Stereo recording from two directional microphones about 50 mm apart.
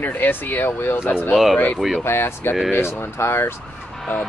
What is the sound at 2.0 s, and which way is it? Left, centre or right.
Speech, left.